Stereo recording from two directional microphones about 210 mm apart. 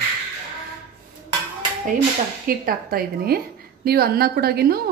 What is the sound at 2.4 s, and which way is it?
A woman's voice, 45° right (ahead or behind).